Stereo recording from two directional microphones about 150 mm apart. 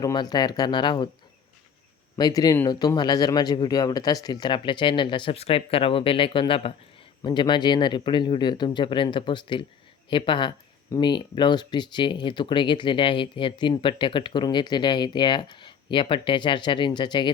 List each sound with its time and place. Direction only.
0.0 s speech: 25° left (ahead or behind)
2.1 s speech: 25° left (ahead or behind)